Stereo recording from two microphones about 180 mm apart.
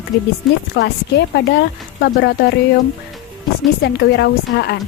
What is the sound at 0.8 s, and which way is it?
Speech, 70° left (ahead or behind).